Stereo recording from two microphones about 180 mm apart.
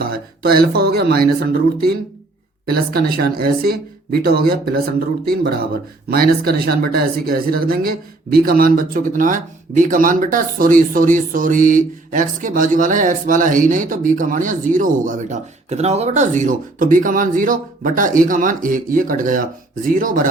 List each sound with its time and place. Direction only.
0.0 s speech: 60° right (ahead or behind)
2.6 s speech: 60° right (ahead or behind)